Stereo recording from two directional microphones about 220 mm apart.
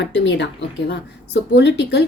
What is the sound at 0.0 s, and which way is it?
Speech, 55° left (ahead or behind).